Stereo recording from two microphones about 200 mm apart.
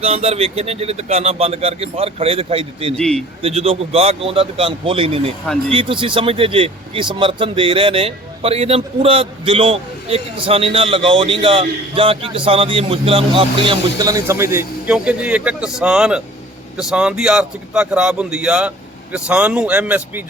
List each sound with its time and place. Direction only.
0.0 s speech: 30° right (ahead or behind)
2.9 s a man's voice: 5° left (ahead or behind)
3.4 s a man's voice: 30° right (ahead or behind); by 20.2 s 10° right (ahead or behind)